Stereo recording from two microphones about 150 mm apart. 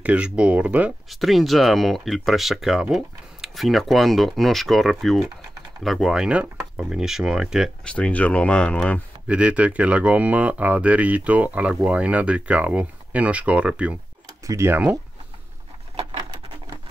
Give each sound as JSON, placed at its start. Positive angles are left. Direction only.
{"t": 0.0, "sound": "speech", "side_deg": -10}
{"t": 7.9, "sound": "speech", "side_deg": 10}
{"t": 9.3, "sound": "speech", "side_deg": -10}
{"t": 14.4, "sound": "speech", "side_deg": -20}